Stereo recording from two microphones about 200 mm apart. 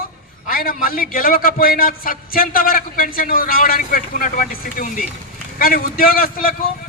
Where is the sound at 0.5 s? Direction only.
45° left (ahead or behind).